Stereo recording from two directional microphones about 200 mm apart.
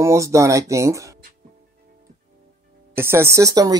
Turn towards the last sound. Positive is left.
turn(degrees=-20)  # may be behind; listen again after turning